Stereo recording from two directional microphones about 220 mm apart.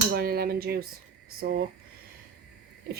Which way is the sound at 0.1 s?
45° right (ahead or behind).